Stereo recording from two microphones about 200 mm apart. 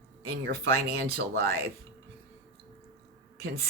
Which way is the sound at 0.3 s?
50° right (ahead or behind).